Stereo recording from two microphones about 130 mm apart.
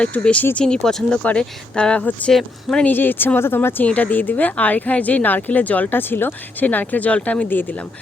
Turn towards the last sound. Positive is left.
turn(degrees=15)  # may be behind; listen again after turning